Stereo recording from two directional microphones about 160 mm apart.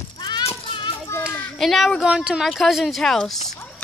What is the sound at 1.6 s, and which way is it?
A woman's voice, centre (ahead or behind).